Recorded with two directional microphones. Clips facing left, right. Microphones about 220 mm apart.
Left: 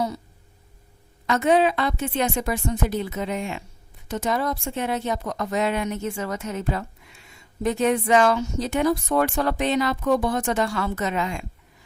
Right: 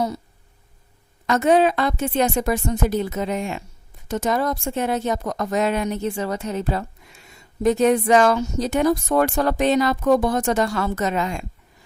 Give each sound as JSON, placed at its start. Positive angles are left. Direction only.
{"t": 1.3, "sound": "a woman's voice", "side_deg": -45}